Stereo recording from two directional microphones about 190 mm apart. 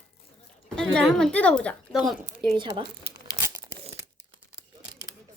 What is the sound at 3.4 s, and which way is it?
Tearing, 15° right (ahead or behind).